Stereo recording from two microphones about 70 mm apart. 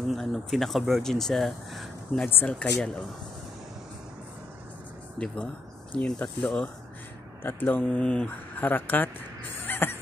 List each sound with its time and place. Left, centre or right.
0.0 s speech: centre
2.2 s speech: left
2.6 s speech: centre
5.2 s speech: centre
7.4 s speech: left
7.8 s speech: centre
8.3 s speech: left
9.7 s a sound: left